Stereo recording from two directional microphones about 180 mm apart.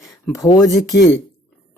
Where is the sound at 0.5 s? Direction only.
20° left (ahead or behind).